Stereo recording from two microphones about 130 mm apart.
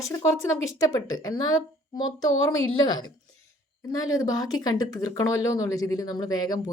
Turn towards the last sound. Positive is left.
turn(degrees=30)  # may be behind; listen again after turning